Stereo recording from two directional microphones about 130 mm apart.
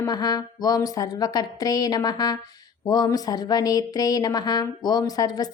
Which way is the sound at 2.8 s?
30° left (ahead or behind).